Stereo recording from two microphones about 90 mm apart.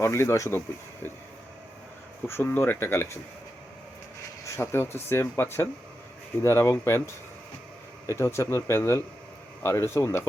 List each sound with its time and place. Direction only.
0.0 s speech: 30° left (ahead or behind)
2.2 s speech: 25° left (ahead or behind)
4.5 s speech: 30° left (ahead or behind)